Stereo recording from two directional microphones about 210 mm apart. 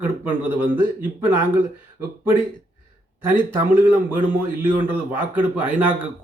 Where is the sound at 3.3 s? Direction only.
10° right (ahead or behind).